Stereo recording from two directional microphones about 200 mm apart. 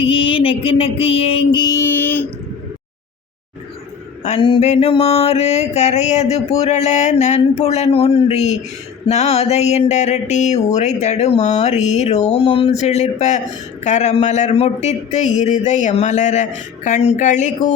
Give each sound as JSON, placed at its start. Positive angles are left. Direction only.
{"t": 0.0, "sound": "music", "side_deg": 25}
{"t": 4.2, "sound": "mantra", "side_deg": 30}